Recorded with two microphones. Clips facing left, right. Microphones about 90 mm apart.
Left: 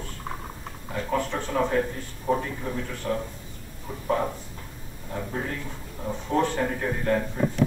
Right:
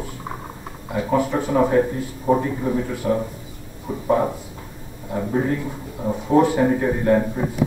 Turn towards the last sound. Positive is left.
turn(degrees=-15)  # may be behind; listen again after turning